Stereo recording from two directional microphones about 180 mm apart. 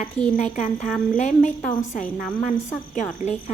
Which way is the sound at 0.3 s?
40° left (ahead or behind).